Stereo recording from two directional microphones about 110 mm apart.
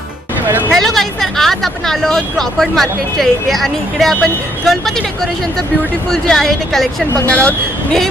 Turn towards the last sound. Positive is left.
turn(degrees=10)  # may be behind; listen again after turning